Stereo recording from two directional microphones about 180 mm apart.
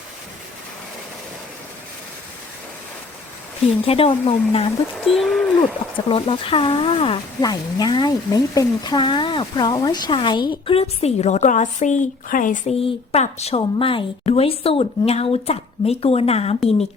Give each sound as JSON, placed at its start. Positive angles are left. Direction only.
{"t": 3.8, "sound": "a woman's voice", "side_deg": 30}
{"t": 5.0, "sound": "speech", "side_deg": 0}
{"t": 6.1, "sound": "speech", "side_deg": 30}
{"t": 12.8, "sound": "a woman's voice", "side_deg": 35}